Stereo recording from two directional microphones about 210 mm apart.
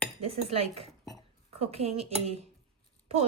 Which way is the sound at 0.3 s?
30° right (ahead or behind).